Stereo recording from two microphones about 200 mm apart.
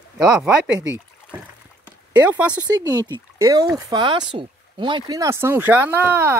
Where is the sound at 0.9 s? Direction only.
5° right (ahead or behind).